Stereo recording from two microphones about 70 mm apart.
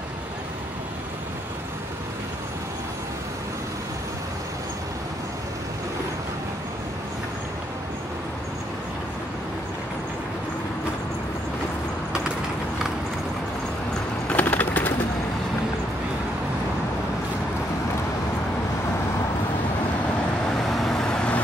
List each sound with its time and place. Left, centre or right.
14.3 s bird: left
20.6 s vehicle: centre